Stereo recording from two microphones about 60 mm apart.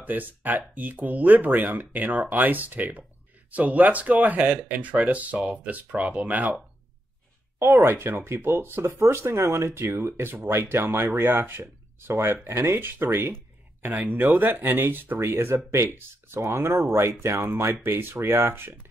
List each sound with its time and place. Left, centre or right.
0.0 s speech: right
7.5 s speech: right
12.1 s speech: right
13.8 s speech: right